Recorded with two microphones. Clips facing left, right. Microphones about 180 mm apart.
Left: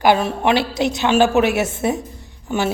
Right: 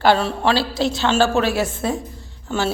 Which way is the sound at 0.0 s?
15° left (ahead or behind).